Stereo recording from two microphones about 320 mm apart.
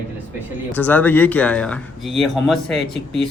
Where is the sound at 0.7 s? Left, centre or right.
Centre.